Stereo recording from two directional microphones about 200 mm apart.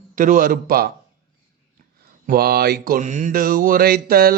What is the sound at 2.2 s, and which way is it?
Speech, 50° right (ahead or behind).